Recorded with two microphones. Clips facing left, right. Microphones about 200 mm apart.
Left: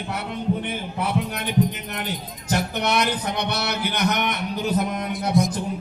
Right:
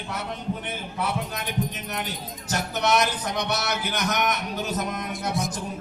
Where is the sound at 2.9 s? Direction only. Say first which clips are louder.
Right 1 dB; 60° left (ahead or behind).